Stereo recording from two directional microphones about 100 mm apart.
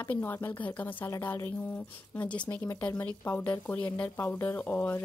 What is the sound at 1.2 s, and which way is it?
Speech, 30° left (ahead or behind).